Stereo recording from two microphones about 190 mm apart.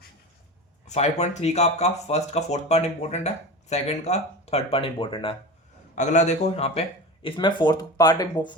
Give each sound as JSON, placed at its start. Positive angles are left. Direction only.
{"t": 0.9, "sound": "speech", "side_deg": 35}
{"t": 6.0, "sound": "speech", "side_deg": 40}